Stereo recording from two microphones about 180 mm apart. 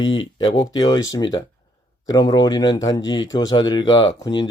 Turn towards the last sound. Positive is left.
turn(degrees=25)  # may be behind; listen again after turning